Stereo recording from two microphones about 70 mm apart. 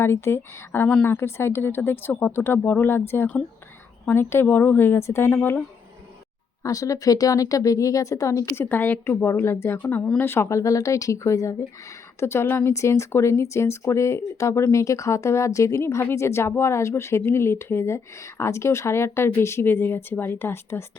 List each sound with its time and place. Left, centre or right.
0.0 s a woman's voice: left
4.9 s speech: left
6.6 s speech: left
8.5 s speech: left
10.5 s speech: left